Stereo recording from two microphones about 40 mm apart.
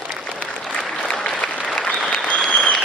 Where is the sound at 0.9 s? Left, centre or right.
Left.